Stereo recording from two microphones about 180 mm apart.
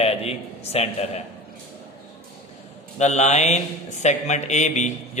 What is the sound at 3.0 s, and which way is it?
Speech, 40° left (ahead or behind).